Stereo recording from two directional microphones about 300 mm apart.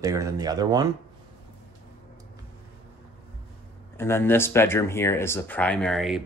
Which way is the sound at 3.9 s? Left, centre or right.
Centre.